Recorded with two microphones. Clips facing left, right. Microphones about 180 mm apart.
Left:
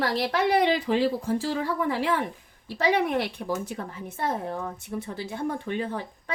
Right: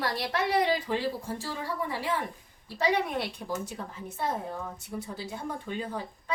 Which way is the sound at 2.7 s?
65° left (ahead or behind).